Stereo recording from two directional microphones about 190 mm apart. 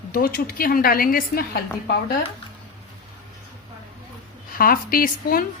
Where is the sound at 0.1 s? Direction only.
55° left (ahead or behind).